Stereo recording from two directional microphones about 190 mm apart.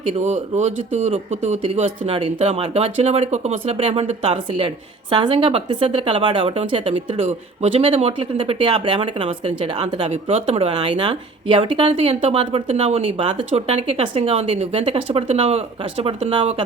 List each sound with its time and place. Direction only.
0.1 s speech: 35° right (ahead or behind)